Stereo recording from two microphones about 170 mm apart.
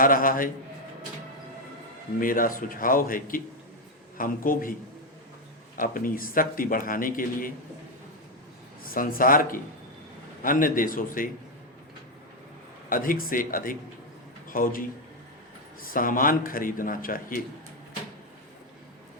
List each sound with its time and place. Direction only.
0.0 s a man's voice: 55° left (ahead or behind)
2.2 s a man's voice: 55° left (ahead or behind)
5.7 s a man's voice: 55° left (ahead or behind)
8.8 s a man's voice: 55° left (ahead or behind)
12.9 s a man's voice: 55° left (ahead or behind)